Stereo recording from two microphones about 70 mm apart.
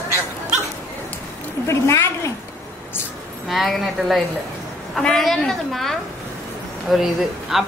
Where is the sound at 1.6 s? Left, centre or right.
Left.